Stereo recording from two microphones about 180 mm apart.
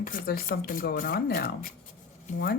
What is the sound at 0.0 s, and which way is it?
Speech, 55° left (ahead or behind).